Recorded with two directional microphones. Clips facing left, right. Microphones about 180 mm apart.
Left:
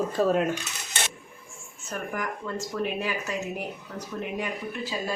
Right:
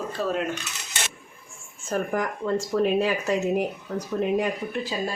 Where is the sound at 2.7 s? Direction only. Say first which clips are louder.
Right 7 dB; 45° right (ahead or behind).